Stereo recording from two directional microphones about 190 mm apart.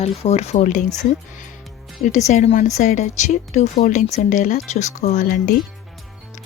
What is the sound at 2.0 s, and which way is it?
Speech, 40° left (ahead or behind).